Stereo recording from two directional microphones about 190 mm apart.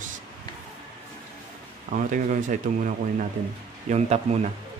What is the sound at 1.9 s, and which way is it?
Speech, 45° right (ahead or behind).